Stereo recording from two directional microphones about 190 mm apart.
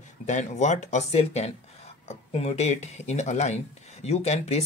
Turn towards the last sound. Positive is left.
turn(degrees=35)  # may be behind; listen again after turning